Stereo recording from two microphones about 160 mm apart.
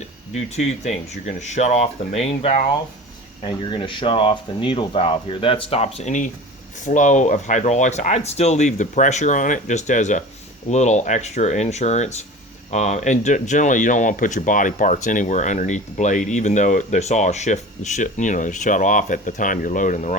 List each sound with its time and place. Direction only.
0.3 s speech: 45° left (ahead or behind)
3.4 s speech: 30° left (ahead or behind); by 20.1 s 50° left (ahead or behind)